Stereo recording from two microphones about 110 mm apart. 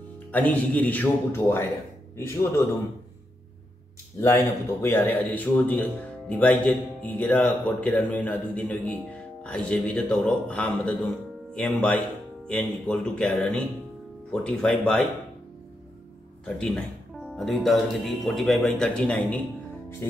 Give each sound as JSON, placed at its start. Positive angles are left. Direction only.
{"t": 0.3, "sound": "speech", "side_deg": 15}
{"t": 4.2, "sound": "speech", "side_deg": 25}
{"t": 16.4, "sound": "speech", "side_deg": 5}
{"t": 20.0, "sound": "speech", "side_deg": 20}